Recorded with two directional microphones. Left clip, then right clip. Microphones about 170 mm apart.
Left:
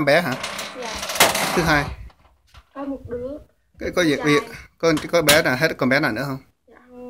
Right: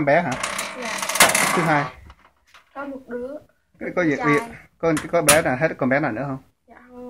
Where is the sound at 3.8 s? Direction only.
10° left (ahead or behind).